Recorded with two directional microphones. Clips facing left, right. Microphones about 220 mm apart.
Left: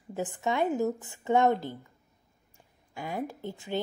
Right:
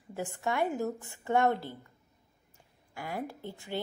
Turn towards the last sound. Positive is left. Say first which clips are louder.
# left 4 dB
turn(degrees=20)  # may be behind; listen again after turning